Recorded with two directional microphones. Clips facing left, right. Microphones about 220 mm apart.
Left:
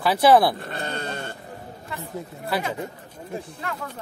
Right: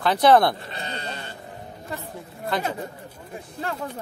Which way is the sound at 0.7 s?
50° left (ahead or behind).